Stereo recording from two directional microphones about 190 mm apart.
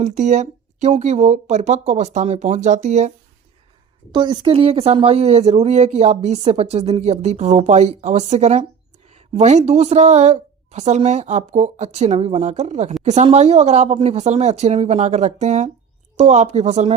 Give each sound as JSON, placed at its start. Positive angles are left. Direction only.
{"t": 0.0, "sound": "speech", "side_deg": -40}
{"t": 4.1, "sound": "speech", "side_deg": -25}